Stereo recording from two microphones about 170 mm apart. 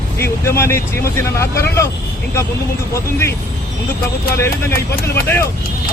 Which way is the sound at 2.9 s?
15° left (ahead or behind).